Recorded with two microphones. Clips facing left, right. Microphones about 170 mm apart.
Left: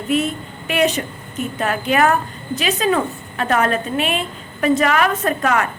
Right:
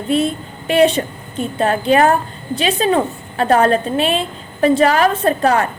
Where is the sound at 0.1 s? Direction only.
30° right (ahead or behind).